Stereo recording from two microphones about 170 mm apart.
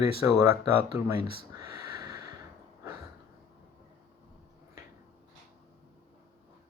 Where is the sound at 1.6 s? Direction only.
25° right (ahead or behind).